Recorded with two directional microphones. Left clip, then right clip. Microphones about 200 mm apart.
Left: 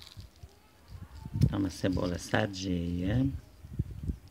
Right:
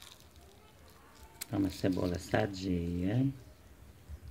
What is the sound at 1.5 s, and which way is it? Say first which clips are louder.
Speech: right 1 dB; 40° left (ahead or behind).